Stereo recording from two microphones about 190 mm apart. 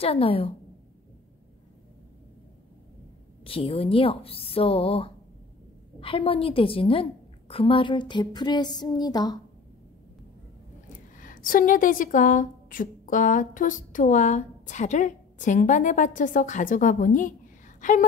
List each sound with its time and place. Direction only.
0.0 s a woman's voice: 30° left (ahead or behind)
3.4 s a woman's voice: 30° left (ahead or behind)
11.1 s a woman's voice: 45° left (ahead or behind)
17.7 s a sound: 45° left (ahead or behind)